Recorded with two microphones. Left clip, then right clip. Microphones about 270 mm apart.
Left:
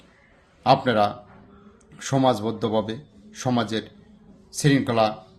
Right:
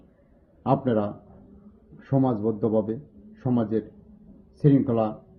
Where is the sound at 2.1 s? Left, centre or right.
Centre.